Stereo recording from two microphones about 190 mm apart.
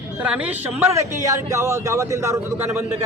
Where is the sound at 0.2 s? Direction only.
5° right (ahead or behind).